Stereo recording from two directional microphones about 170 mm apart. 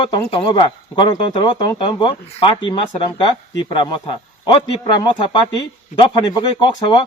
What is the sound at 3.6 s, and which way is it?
Speech, 30° left (ahead or behind).